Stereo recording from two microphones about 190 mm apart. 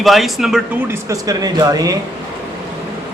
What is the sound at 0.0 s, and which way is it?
Speech, centre (ahead or behind).